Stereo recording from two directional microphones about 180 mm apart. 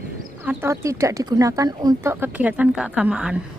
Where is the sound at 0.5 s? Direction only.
10° right (ahead or behind).